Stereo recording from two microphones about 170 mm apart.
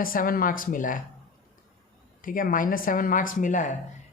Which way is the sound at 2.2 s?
55° left (ahead or behind).